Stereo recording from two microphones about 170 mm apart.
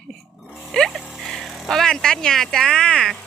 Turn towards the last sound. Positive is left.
turn(degrees=5)  # may be behind; listen again after turning